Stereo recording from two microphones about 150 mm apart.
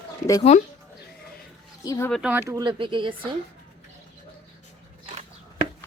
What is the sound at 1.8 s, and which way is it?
Speech, 20° left (ahead or behind).